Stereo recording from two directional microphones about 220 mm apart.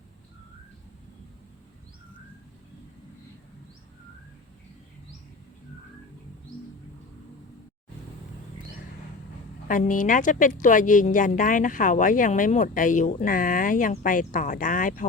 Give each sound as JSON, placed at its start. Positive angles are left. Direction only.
{"t": 9.6, "sound": "a woman's voice", "side_deg": 35}